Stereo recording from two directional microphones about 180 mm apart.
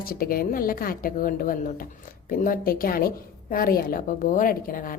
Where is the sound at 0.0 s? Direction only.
55° left (ahead or behind).